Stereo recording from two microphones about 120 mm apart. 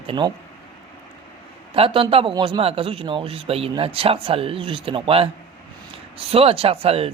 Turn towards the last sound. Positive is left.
turn(degrees=-55)  # may be behind; listen again after turning